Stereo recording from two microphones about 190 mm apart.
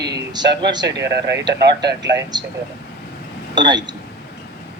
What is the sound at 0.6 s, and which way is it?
Speech, 20° right (ahead or behind).